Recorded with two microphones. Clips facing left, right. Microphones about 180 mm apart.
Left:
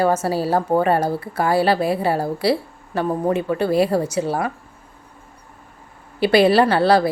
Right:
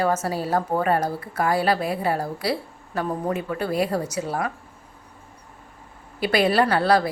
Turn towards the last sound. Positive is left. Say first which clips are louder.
# left 4 dB
turn(degrees=30)  # may be behind; listen again after turning